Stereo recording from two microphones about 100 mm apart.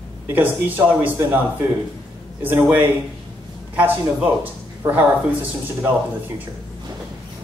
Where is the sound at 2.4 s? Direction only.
15° right (ahead or behind).